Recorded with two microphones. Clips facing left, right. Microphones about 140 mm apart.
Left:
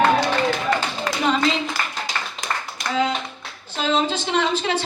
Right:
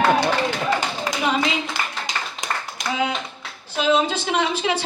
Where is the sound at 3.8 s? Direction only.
10° right (ahead or behind).